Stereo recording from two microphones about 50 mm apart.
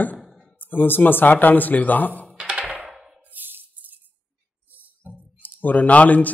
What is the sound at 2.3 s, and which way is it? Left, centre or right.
Music, centre.